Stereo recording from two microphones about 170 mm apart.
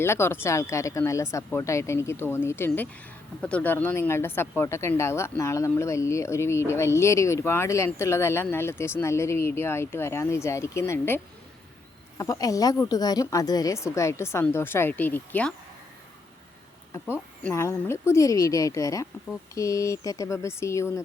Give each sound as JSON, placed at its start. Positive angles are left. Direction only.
{"t": 0.0, "sound": "a woman's voice", "side_deg": 15}
{"t": 17.4, "sound": "a woman's voice", "side_deg": 15}